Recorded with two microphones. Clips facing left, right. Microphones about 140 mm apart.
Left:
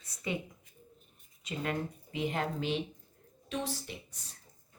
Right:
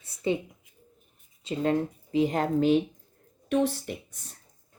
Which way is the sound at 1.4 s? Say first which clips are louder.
Right 9 dB; 30° right (ahead or behind).